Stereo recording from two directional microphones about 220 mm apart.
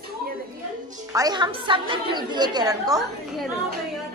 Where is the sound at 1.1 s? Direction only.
20° right (ahead or behind).